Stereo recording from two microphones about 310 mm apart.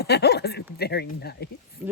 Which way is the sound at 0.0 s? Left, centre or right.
Left.